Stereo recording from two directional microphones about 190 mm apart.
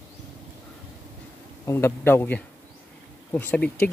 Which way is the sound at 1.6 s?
15° left (ahead or behind).